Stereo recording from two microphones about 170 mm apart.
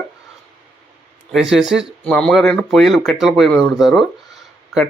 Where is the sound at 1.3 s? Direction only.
Centre (ahead or behind).